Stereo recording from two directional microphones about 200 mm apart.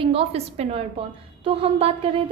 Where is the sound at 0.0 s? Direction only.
30° right (ahead or behind).